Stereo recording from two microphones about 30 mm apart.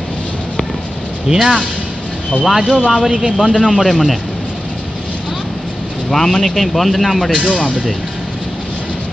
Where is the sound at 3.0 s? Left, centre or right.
Centre.